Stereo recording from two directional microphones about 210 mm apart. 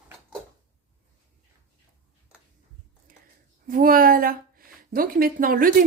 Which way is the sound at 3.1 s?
40° right (ahead or behind).